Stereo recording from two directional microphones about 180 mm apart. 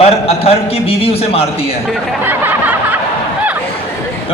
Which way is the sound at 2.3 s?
10° right (ahead or behind).